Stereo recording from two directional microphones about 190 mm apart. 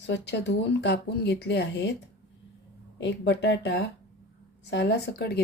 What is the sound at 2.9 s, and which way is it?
Speech, 70° left (ahead or behind).